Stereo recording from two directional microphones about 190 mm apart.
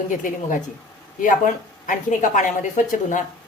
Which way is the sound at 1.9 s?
45° left (ahead or behind).